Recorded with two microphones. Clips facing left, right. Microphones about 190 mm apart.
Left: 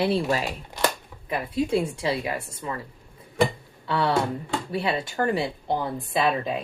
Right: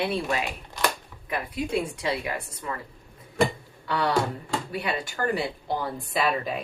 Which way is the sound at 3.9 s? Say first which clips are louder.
Left 2 dB; 25° left (ahead or behind).